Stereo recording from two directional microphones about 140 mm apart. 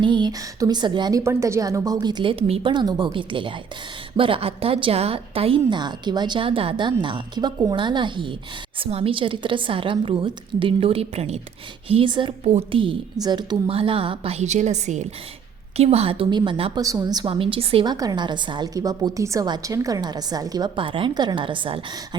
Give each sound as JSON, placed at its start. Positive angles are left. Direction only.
{"t": 0.0, "sound": "a woman's voice", "side_deg": -35}
{"t": 1.2, "sound": "a woman's voice", "side_deg": -20}
{"t": 15.8, "sound": "a woman's voice", "side_deg": -45}
{"t": 16.7, "sound": "a woman's voice", "side_deg": -25}
{"t": 17.2, "sound": "a woman's voice", "side_deg": -40}
{"t": 17.8, "sound": "a woman's voice", "side_deg": -25}